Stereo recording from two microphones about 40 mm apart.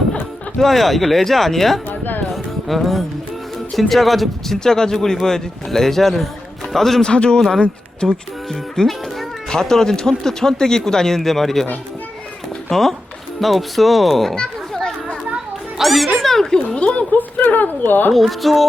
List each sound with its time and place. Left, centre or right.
0.6 s speech: centre
1.9 s music: left
2.3 s music: centre
3.8 s speech: centre
4.6 s speech: centre
7.0 s a man's voice: left; by 11.6 s centre
12.7 s speech: centre
14.3 s children playing: centre
15.8 s speech: centre
16.7 s speech: left
17.1 s speech: left
18.1 s speech: centre